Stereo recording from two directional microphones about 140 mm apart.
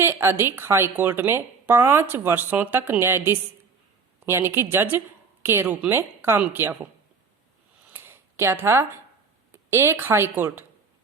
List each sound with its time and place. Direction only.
0.0 s a woman's voice: 15° right (ahead or behind)
7.9 s a sound: 15° right (ahead or behind)
9.6 s a woman's voice: 20° right (ahead or behind)